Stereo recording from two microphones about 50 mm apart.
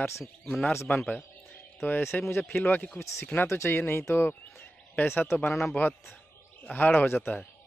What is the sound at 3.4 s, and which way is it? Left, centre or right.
Speech, left.